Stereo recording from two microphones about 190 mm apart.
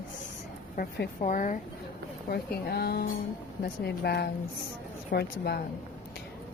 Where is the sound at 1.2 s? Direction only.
40° left (ahead or behind).